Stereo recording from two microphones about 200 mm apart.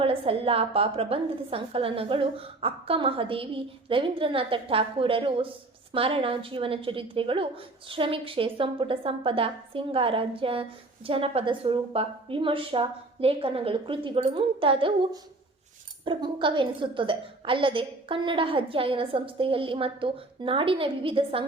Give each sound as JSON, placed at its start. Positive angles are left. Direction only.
{"t": 0.0, "sound": "a woman's voice", "side_deg": -30}